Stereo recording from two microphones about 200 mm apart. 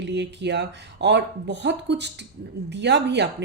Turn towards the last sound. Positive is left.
turn(degrees=-60)  # may be behind; listen again after turning